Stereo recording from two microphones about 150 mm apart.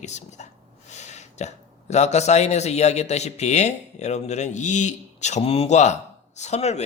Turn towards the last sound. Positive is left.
turn(degrees=45)  # may be behind; listen again after turning